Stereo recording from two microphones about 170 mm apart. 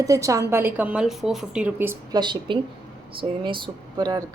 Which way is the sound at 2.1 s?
25° right (ahead or behind).